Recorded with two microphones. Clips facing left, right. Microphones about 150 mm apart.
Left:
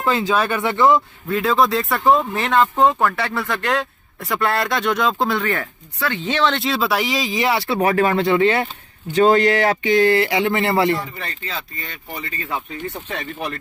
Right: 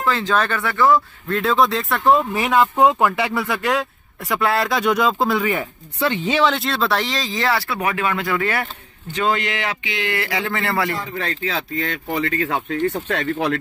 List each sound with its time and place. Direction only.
0.0 s speech: 15° left (ahead or behind)
1.3 s speech: centre (ahead or behind); by 7.8 s 20° left (ahead or behind)
7.8 s speech: 35° left (ahead or behind)
9.0 s speech: 40° left (ahead or behind)
10.1 s speech: 25° left (ahead or behind)
11.1 s speech: 90° right